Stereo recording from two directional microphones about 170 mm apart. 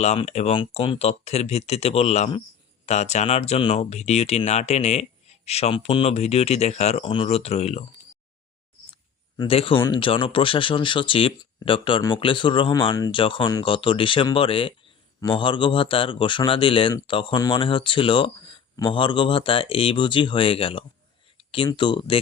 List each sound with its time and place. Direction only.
0.0 s speech: 40° left (ahead or behind)
9.4 s a man's voice: 35° left (ahead or behind)